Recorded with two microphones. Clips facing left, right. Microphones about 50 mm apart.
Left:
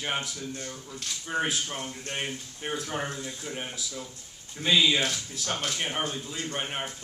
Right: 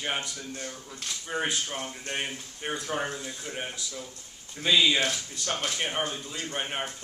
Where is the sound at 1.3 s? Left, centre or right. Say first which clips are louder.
Left 1 dB; centre.